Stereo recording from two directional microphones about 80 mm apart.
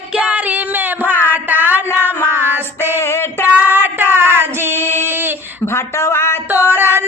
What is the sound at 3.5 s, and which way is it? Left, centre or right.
Child singing, right.